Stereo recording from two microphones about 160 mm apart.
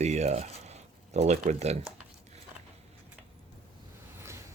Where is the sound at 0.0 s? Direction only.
45° right (ahead or behind).